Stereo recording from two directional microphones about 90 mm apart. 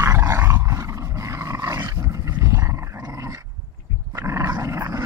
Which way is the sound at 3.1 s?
35° right (ahead or behind).